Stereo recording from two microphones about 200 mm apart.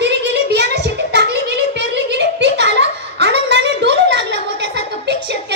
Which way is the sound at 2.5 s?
60° right (ahead or behind).